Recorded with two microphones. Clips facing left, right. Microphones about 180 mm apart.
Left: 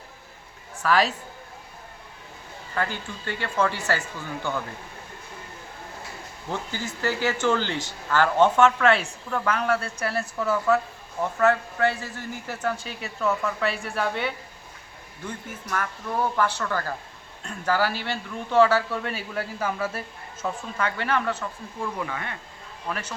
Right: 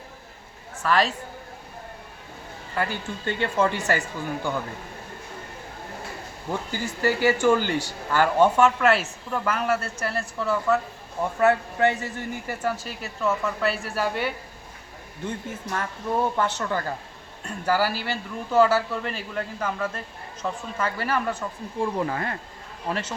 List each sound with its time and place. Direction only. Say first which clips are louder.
0.8 s a man's voice: even; centre (ahead or behind)
2.7 s speech: right 1 dB; 15° right (ahead or behind)
6.5 s speech: right 2 dB; 10° right (ahead or behind); by 10.8 s 5° left (ahead or behind)
11.2 s a man's voice: right 1 dB; 15° right (ahead or behind)
15.2 s speech: right 4 dB; 25° right (ahead or behind)
17.7 s a man's voice: right 1 dB; 10° right (ahead or behind); by 20.0 s 10° left (ahead or behind)
20.4 s speech: even; 5° right (ahead or behind)
21.8 s speech: right 5 dB; 35° right (ahead or behind)
22.9 s speech: right 3 dB; 25° right (ahead or behind)